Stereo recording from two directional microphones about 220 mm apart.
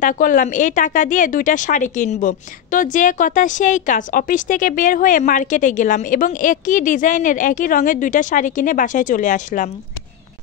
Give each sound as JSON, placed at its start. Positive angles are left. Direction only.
{"t": 0.0, "sound": "speech", "side_deg": 35}